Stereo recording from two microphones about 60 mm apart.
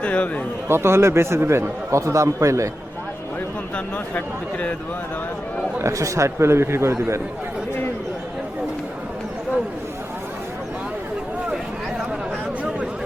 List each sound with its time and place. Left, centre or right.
0.0 s speech: left
0.7 s speech: right
2.0 s speech: right
5.8 s speech: right